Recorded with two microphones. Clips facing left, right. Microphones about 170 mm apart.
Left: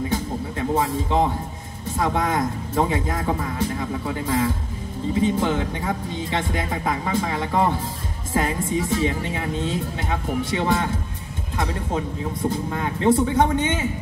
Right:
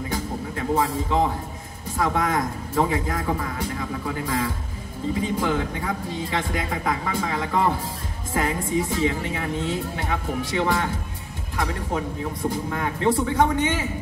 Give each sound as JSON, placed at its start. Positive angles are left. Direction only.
{"t": 0.1, "sound": "music", "side_deg": 25}
{"t": 2.0, "sound": "speech", "side_deg": 25}